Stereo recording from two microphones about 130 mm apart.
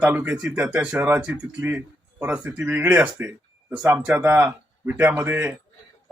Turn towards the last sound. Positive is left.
turn(degrees=-15)  # may be behind; listen again after turning